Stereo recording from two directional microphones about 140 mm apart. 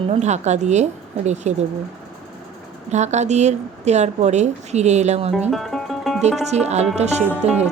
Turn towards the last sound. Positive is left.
turn(degrees=-50)  # may be behind; listen again after turning